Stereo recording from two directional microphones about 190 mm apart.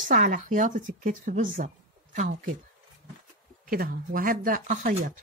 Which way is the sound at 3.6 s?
50° right (ahead or behind).